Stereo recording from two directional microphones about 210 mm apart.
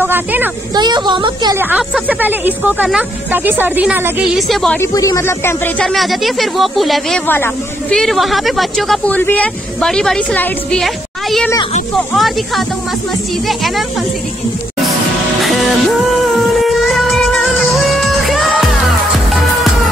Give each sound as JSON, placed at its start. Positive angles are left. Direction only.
{"t": 0.0, "sound": "a sound", "side_deg": -10}
{"t": 0.7, "sound": "a woman's voice", "side_deg": -20}
{"t": 1.6, "sound": "speech", "side_deg": -5}
{"t": 4.9, "sound": "speech", "side_deg": 15}
{"t": 7.2, "sound": "speech", "side_deg": 10}
{"t": 16.6, "sound": "music", "side_deg": 0}